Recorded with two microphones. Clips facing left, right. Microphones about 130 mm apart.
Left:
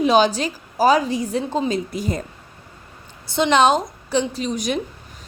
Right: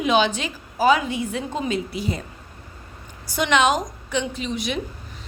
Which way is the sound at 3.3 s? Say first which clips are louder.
Left 4 dB; 30° left (ahead or behind).